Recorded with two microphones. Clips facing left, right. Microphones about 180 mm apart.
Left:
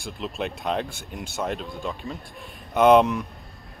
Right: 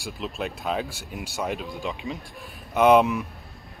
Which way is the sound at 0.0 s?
Centre (ahead or behind).